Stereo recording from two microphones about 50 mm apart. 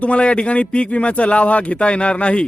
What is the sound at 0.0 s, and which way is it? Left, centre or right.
A man's voice, left.